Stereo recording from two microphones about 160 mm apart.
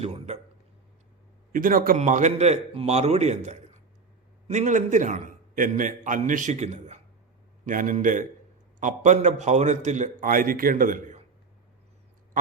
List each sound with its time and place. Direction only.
0.0 s a man's voice: 45° right (ahead or behind)
1.5 s a man's voice: 60° right (ahead or behind)
2.0 s a man's voice: 50° right (ahead or behind)